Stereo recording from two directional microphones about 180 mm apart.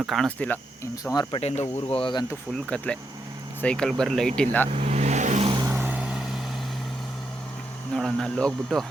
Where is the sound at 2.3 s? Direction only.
5° right (ahead or behind).